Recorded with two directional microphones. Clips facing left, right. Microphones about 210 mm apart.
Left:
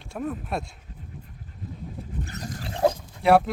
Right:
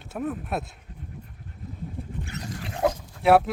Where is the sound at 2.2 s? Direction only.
40° left (ahead or behind).